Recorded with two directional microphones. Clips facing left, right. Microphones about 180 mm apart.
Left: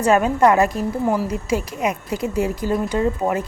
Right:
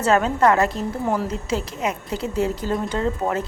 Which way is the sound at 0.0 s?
15° left (ahead or behind).